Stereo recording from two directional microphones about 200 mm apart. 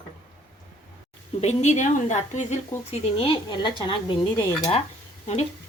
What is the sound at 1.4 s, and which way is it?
A woman's voice, 35° left (ahead or behind).